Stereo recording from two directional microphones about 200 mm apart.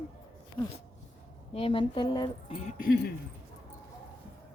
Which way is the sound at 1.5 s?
25° left (ahead or behind).